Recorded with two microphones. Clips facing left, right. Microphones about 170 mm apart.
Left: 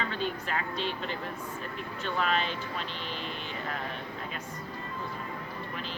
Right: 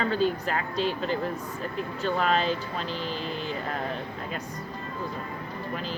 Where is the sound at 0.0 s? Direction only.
40° right (ahead or behind).